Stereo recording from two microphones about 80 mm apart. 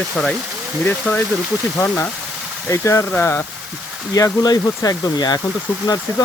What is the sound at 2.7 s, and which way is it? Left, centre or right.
Speech, left.